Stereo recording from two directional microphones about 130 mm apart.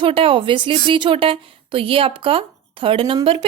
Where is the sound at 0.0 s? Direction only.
45° right (ahead or behind).